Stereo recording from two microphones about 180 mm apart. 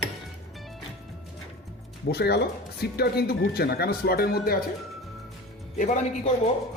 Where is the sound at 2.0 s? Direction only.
65° left (ahead or behind).